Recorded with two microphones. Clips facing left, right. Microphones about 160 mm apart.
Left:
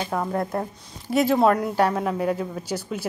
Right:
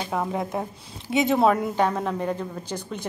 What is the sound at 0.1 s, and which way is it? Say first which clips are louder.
Speech: even; 5° right (ahead or behind).